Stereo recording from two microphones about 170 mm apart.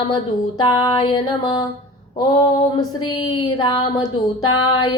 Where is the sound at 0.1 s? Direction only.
25° left (ahead or behind).